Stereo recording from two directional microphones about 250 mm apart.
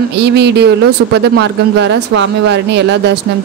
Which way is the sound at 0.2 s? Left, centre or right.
Right.